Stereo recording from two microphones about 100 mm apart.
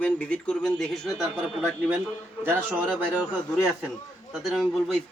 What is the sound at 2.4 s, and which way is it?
Speech, 20° right (ahead or behind).